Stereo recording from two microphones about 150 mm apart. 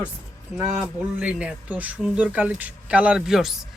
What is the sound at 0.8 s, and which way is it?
Speech, 5° right (ahead or behind).